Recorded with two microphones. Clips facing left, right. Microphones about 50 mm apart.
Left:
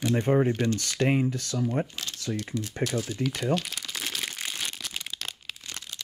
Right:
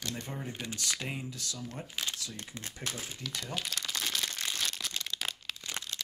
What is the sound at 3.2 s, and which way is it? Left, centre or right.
Speech, left.